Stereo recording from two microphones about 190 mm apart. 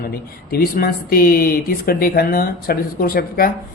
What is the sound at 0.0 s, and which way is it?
A woman's voice, 50° left (ahead or behind).